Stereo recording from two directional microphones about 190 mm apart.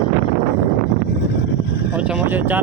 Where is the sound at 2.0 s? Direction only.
5° right (ahead or behind).